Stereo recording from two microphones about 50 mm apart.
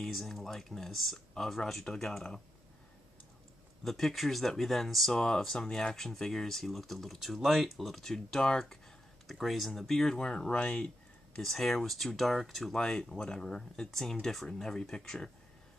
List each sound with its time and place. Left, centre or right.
0.0 s speech: centre
3.8 s speech: centre
8.0 s speech: centre
9.3 s speech: centre; by 10.9 s left
11.4 s speech: centre